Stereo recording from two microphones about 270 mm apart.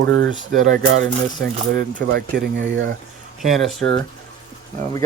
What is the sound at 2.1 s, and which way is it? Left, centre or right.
Speech, right.